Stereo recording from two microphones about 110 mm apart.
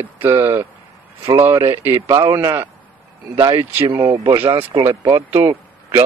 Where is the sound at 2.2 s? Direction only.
30° right (ahead or behind).